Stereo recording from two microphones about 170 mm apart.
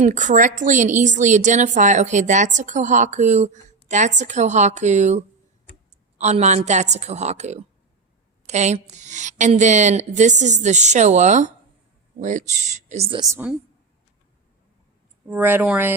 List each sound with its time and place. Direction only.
0.0 s a woman's voice: 45° right (ahead or behind)
15.3 s speech: 10° right (ahead or behind)